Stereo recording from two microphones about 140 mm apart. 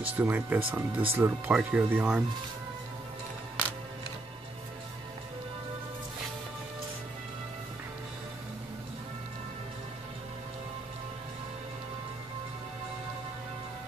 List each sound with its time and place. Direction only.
0.0 s speech: 10° right (ahead or behind)